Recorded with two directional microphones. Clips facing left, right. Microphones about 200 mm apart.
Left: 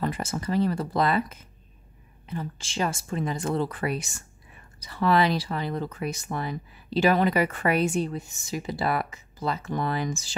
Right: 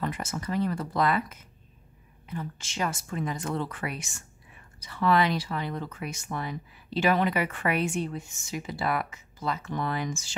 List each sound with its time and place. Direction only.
0.0 s speech: 35° left (ahead or behind)